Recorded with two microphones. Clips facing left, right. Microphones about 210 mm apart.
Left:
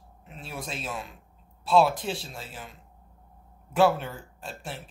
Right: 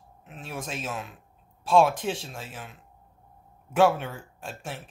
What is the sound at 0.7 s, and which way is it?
Speech, 5° right (ahead or behind).